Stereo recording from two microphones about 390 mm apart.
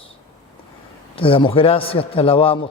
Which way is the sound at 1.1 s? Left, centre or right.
Centre.